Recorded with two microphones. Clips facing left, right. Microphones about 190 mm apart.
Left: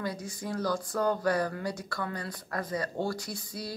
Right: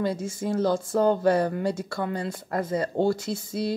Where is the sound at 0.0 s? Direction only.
25° right (ahead or behind).